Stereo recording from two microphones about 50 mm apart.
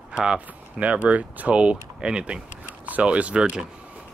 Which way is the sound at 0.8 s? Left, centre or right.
Right.